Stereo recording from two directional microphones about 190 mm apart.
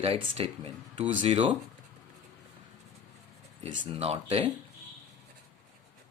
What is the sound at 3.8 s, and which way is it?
Speech, 30° right (ahead or behind).